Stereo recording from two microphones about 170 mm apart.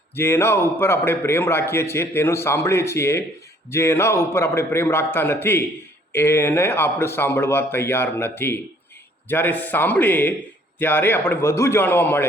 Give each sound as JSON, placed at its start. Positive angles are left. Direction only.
{"t": 0.2, "sound": "a man's voice", "side_deg": 15}